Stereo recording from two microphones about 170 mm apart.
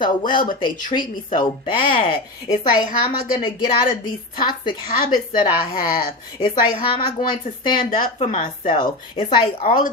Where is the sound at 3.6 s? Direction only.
55° left (ahead or behind).